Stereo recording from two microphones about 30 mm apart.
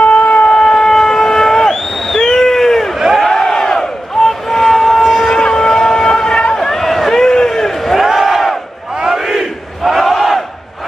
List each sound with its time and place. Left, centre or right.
0.0 s shofar: left
0.5 s vehicle: centre
2.0 s a sound: centre
3.2 s crowd: centre
5.3 s shofar: left
6.5 s a sound: centre
8.0 s crowd: centre
9.2 s battle cry: centre